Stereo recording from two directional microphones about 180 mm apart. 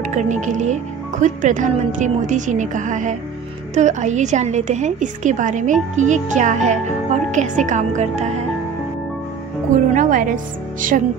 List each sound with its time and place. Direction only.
0.1 s a woman's voice: 45° right (ahead or behind)
9.9 s a woman's voice: 45° right (ahead or behind)